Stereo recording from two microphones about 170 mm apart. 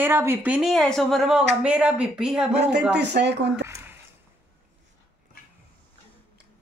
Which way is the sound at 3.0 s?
90° right.